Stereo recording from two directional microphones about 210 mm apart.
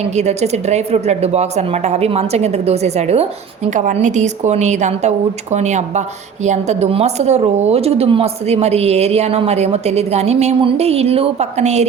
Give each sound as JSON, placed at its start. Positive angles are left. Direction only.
{"t": 0.2, "sound": "speech", "side_deg": -30}